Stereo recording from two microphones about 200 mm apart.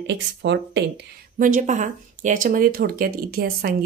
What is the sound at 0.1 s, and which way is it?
Speech, 60° right (ahead or behind).